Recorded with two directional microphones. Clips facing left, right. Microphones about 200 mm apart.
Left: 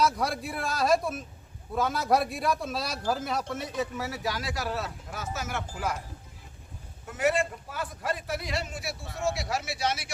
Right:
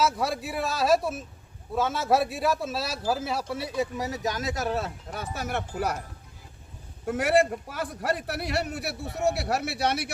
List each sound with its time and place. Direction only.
0.0 s a man's voice: 5° right (ahead or behind); by 5.5 s 30° right (ahead or behind)
5.5 s a man's voice: 60° right (ahead or behind)
7.0 s a man's voice: 50° right (ahead or behind)